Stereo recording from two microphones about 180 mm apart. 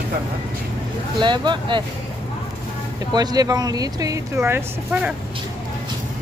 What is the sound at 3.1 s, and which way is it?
Speech, 20° right (ahead or behind).